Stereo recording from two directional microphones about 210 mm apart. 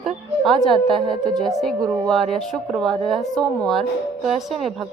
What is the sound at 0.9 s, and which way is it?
Speech, 20° right (ahead or behind).